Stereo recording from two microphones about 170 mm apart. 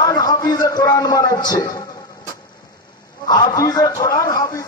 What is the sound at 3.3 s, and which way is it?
A man's voice, 25° left (ahead or behind).